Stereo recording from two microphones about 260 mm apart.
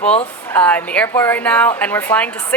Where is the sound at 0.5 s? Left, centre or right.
Centre.